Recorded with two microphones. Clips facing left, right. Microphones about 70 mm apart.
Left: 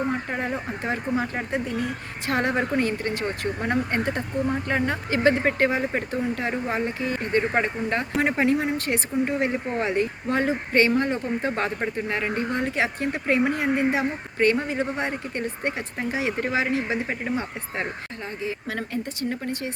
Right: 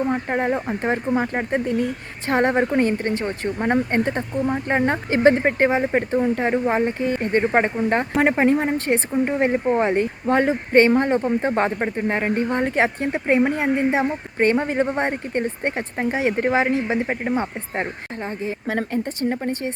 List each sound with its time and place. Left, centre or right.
0.1 s speech: right